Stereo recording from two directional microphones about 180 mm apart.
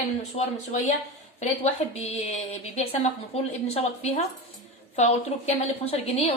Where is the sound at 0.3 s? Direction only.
35° left (ahead or behind).